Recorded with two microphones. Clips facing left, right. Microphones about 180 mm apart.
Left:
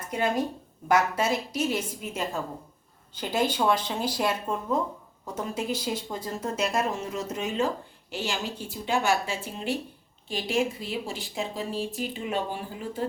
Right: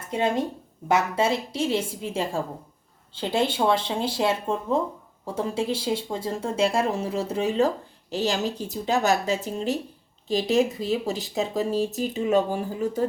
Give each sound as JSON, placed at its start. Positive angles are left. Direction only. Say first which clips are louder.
{"t": 0.1, "sound": "speech", "louder": "right 2 dB", "side_deg": -25}